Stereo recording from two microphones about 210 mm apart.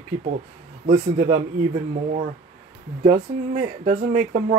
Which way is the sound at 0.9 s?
45° right (ahead or behind).